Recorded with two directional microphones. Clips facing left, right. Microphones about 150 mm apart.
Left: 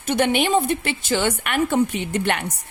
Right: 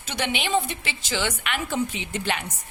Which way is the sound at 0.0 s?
50° left (ahead or behind).